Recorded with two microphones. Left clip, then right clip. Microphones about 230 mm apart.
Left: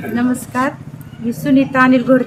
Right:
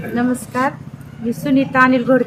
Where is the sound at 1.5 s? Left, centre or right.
Centre.